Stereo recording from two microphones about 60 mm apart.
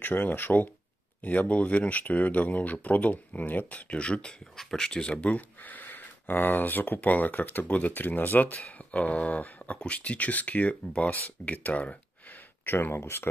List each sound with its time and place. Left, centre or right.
0.0 s speech: left; by 5.1 s centre
5.1 s speech: left
12.6 s speech: left